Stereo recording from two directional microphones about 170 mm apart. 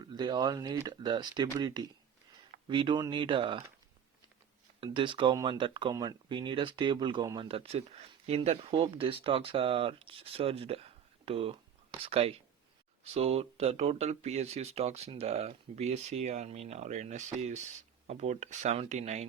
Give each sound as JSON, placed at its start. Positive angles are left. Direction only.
{"t": 0.0, "sound": "speech", "side_deg": -25}
{"t": 4.8, "sound": "speech", "side_deg": -30}